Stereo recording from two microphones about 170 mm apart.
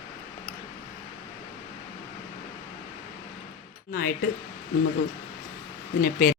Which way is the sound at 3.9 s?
60° left (ahead or behind).